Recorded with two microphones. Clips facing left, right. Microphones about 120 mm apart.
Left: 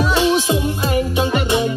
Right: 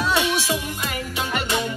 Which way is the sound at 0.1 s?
25° left (ahead or behind).